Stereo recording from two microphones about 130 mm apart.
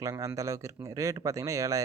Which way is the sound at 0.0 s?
25° right (ahead or behind).